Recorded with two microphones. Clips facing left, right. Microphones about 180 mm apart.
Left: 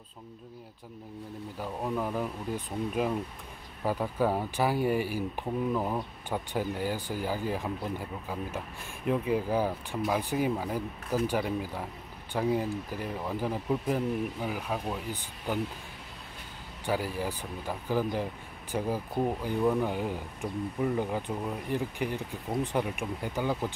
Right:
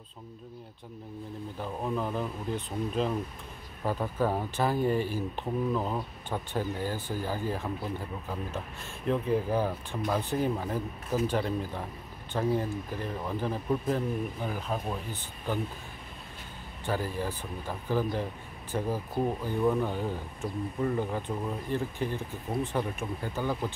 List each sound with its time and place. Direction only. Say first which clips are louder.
1.6 s speech: even; 5° left (ahead or behind)
16.8 s speech: left 1 dB; 10° left (ahead or behind)